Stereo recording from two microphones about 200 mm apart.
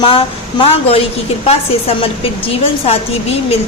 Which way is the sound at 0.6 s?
30° left (ahead or behind).